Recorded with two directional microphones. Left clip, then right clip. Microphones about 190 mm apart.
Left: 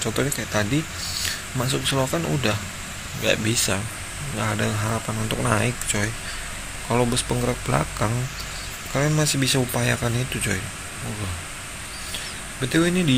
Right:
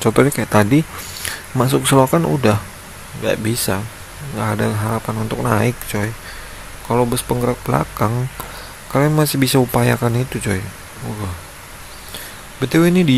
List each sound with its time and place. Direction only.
0.0 s speech: 35° right (ahead or behind); by 8.2 s 20° right (ahead or behind)
8.9 s speech: 30° right (ahead or behind)
12.5 s speech: 35° right (ahead or behind)